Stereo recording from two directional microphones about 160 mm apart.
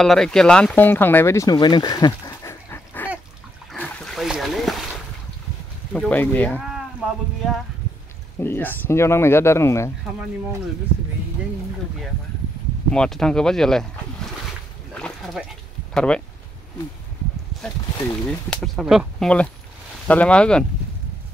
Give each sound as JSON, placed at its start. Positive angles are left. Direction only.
{"t": 0.0, "sound": "speech", "side_deg": 5}
{"t": 3.7, "sound": "a sound", "side_deg": 5}
{"t": 5.9, "sound": "speech", "side_deg": 10}
{"t": 7.0, "sound": "speech", "side_deg": -5}
{"t": 8.4, "sound": "speech", "side_deg": 15}
{"t": 12.9, "sound": "speech", "side_deg": 5}
{"t": 15.0, "sound": "a sound", "side_deg": 5}
{"t": 15.9, "sound": "speech", "side_deg": 5}
{"t": 18.2, "sound": "speech", "side_deg": 5}